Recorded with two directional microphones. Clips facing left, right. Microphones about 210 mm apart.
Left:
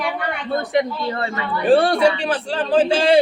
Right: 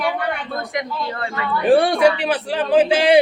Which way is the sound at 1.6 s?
10° right (ahead or behind).